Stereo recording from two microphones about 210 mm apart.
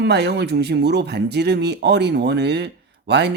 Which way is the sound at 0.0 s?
50° right (ahead or behind).